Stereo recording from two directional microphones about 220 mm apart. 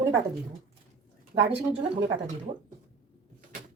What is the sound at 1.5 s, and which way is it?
A woman's voice, 25° right (ahead or behind).